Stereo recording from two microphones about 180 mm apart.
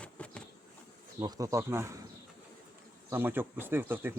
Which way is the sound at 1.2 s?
20° right (ahead or behind).